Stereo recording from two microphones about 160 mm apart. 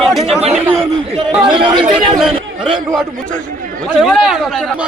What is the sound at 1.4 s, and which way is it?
Speech, 30° right (ahead or behind).